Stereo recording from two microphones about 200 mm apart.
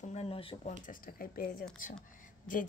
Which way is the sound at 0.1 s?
30° left (ahead or behind).